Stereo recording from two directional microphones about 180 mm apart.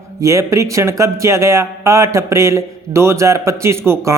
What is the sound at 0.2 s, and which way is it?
A man's voice, 15° right (ahead or behind).